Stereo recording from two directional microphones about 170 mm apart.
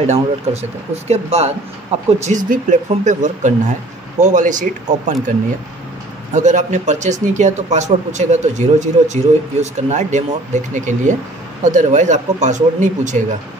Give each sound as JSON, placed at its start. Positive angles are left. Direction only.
{"t": 0.0, "sound": "speech", "side_deg": -40}
{"t": 6.3, "sound": "speech", "side_deg": -45}